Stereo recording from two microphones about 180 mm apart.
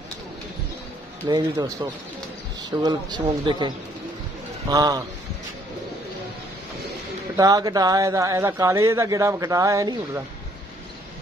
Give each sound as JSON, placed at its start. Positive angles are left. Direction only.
{"t": 1.2, "sound": "speech", "side_deg": -25}
{"t": 7.3, "sound": "speech", "side_deg": -20}